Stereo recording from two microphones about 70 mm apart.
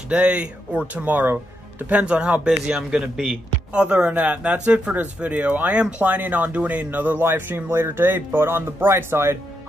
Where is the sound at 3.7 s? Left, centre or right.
Centre.